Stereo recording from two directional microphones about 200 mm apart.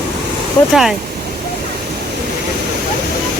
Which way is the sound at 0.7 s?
Centre (ahead or behind).